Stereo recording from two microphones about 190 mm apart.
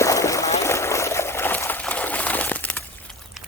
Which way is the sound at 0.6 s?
15° left (ahead or behind).